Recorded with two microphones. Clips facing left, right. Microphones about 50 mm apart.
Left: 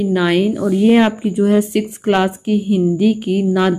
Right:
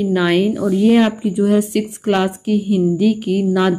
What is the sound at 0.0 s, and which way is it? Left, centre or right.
Speech, centre.